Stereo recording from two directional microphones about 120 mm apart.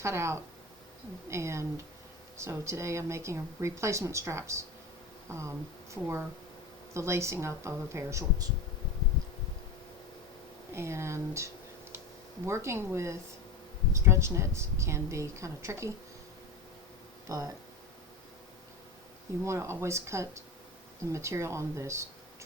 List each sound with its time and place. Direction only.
0.0 s speech: 25° right (ahead or behind)
10.8 s speech: 20° right (ahead or behind)
17.2 s speech: 30° right (ahead or behind)
19.5 s speech: 25° right (ahead or behind)